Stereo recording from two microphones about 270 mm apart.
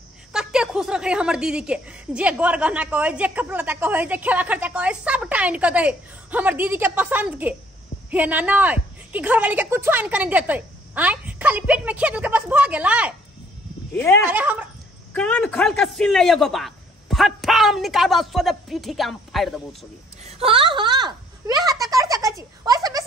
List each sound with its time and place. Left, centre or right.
0.3 s a woman's voice: centre
13.9 s speech: centre
14.2 s a woman's voice: centre
20.2 s a sound: right